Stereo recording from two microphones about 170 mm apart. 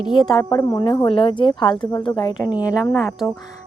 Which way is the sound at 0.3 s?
20° left (ahead or behind).